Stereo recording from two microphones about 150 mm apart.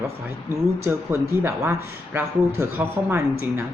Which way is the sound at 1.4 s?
15° right (ahead or behind).